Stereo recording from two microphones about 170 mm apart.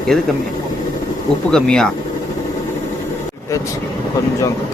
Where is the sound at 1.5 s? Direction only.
5° left (ahead or behind).